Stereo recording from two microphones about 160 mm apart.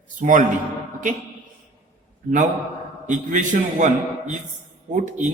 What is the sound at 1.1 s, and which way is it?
Speech, 55° right (ahead or behind).